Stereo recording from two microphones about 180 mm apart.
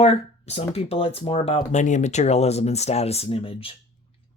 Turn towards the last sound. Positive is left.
turn(degrees=30)  # may be behind; listen again after turning